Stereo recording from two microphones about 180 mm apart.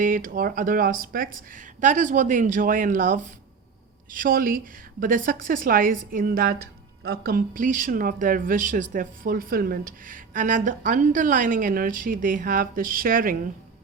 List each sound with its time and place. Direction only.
0.0 s speech: 50° right (ahead or behind)